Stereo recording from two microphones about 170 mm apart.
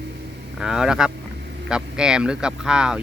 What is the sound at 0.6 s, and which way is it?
Speech, 5° right (ahead or behind).